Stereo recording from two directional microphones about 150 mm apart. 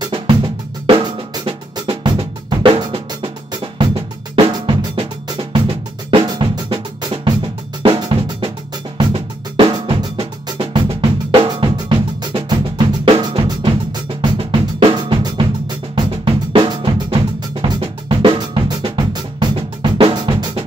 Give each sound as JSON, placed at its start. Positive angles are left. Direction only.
{"t": 0.8, "sound": "drum", "side_deg": -35}
{"t": 6.0, "sound": "drum", "side_deg": -30}